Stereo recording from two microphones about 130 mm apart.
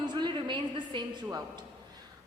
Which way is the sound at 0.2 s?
35° right (ahead or behind).